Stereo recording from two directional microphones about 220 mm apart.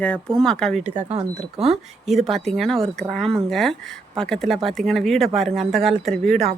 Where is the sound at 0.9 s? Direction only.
30° right (ahead or behind).